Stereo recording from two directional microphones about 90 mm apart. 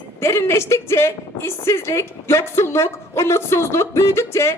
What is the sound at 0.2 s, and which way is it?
A woman's voice, 30° left (ahead or behind).